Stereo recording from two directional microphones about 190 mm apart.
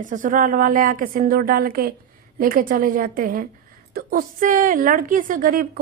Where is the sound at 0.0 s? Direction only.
45° right (ahead or behind).